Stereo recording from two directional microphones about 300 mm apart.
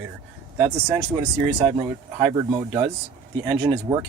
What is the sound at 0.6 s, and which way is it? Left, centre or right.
Speech, centre.